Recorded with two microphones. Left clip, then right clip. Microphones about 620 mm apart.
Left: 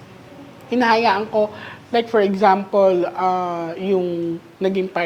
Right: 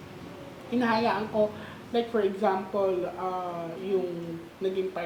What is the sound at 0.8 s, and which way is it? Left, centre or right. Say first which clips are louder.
A woman's voice: left 10 dB; left.